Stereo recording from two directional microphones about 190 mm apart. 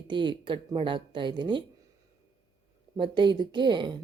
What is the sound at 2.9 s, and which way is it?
Speech, 25° right (ahead or behind).